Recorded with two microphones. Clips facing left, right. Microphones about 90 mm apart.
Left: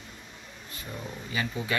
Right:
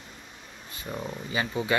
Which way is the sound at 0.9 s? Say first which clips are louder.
Right 3 dB; 25° right (ahead or behind).